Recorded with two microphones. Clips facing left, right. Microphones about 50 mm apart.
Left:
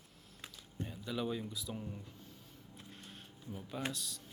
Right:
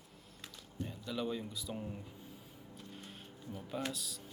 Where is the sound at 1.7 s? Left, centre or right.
Centre.